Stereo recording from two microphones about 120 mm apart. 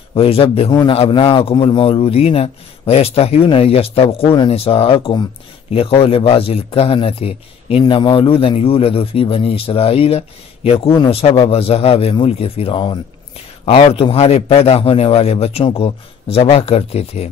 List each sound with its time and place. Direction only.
0.1 s a man's voice: 50° left (ahead or behind)
7.8 s a man's voice: 40° left (ahead or behind); by 17.3 s 60° left (ahead or behind)